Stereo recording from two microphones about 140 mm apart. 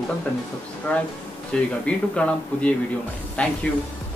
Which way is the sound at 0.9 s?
10° left (ahead or behind).